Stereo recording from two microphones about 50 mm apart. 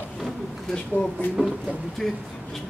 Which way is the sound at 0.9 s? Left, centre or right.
Right.